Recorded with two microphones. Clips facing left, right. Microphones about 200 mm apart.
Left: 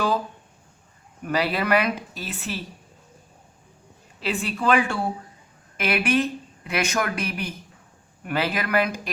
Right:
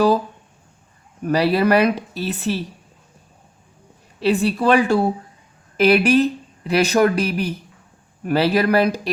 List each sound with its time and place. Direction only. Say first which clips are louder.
1.2 s speech: right 7 dB; 35° right (ahead or behind)
4.2 s speech: right 9 dB; 35° right (ahead or behind)